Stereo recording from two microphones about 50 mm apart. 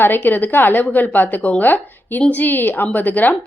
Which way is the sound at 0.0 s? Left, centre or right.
Left.